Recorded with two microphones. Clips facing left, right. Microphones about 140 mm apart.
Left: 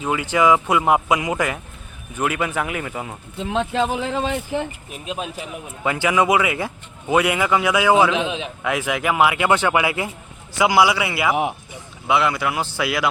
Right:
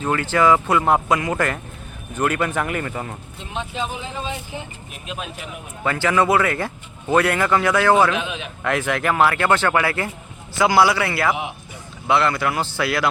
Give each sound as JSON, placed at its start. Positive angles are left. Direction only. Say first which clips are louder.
{"t": 0.0, "sound": "speech", "louder": "even", "side_deg": 10}
{"t": 3.4, "sound": "speech", "louder": "left 7 dB", "side_deg": 90}
{"t": 5.8, "sound": "speech", "louder": "even", "side_deg": 15}
{"t": 8.1, "sound": "a man's voice", "louder": "left 3 dB", "side_deg": 25}
{"t": 8.6, "sound": "speech", "louder": "right 1 dB", "side_deg": 10}